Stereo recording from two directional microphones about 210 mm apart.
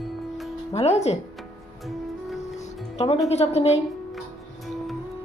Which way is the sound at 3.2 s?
30° left (ahead or behind).